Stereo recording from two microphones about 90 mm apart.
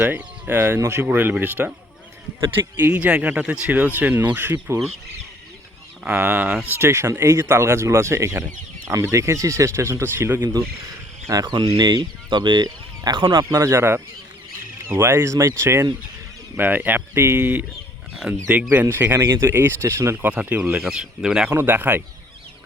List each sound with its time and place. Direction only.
0.2 s speech: 25° right (ahead or behind)
2.7 s speech: 20° right (ahead or behind)
6.1 s speech: 20° right (ahead or behind)
11.3 s speech: 50° right (ahead or behind)
13.5 s speech: 35° right (ahead or behind)
18.3 s speech: 10° right (ahead or behind)
18.8 s speech: 25° right (ahead or behind)
20.2 s speech: 15° right (ahead or behind)
21.6 s speech: 20° right (ahead or behind)